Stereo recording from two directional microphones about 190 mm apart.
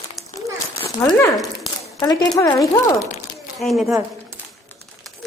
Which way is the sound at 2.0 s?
20° left (ahead or behind).